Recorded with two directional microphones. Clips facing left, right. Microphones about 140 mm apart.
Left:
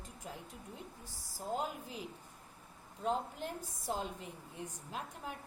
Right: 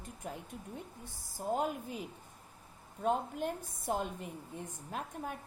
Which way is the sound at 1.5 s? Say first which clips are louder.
Right 4 dB; 55° right (ahead or behind).